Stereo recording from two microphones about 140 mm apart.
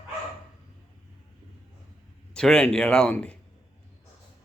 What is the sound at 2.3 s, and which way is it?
Speech, 5° left (ahead or behind).